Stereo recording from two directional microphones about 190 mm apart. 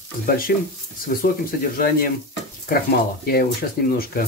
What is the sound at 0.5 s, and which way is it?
Speech, 55° left (ahead or behind).